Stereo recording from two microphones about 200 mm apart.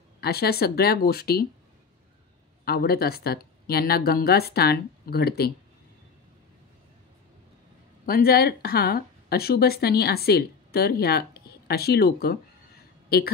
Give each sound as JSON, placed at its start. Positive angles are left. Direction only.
{"t": 0.2, "sound": "speech", "side_deg": 50}
{"t": 2.6, "sound": "speech", "side_deg": 50}
{"t": 8.0, "sound": "speech", "side_deg": 50}